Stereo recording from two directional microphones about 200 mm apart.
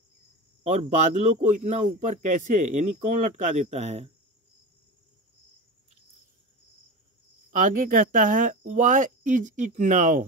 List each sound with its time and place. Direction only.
0.8 s speech: 35° right (ahead or behind)
7.5 s speech: 40° right (ahead or behind)